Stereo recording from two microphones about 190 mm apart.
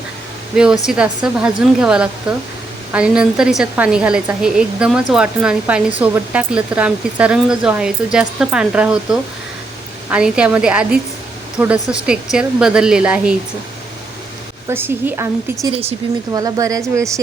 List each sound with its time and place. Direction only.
0.5 s speech: 5° right (ahead or behind)
14.7 s speech: 10° right (ahead or behind)
15.6 s speech: 30° right (ahead or behind)
16.3 s speech: 20° right (ahead or behind)